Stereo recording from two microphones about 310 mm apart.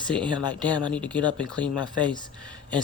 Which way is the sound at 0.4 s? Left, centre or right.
Centre.